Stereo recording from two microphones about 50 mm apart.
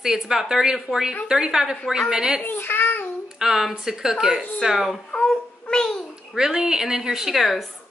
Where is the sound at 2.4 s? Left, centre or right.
Left.